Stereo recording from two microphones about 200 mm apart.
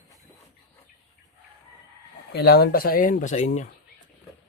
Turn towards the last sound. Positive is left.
turn(degrees=35)  # may be behind; listen again after turning